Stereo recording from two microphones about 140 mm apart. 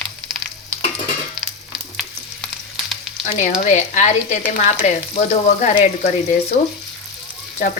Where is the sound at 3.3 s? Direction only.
55° left (ahead or behind).